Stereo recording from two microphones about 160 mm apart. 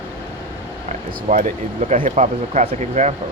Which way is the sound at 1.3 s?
55° right (ahead or behind).